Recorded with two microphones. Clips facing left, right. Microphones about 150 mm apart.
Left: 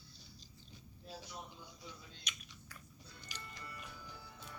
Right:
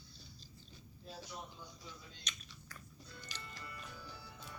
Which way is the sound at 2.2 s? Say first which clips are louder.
Even; 10° left (ahead or behind).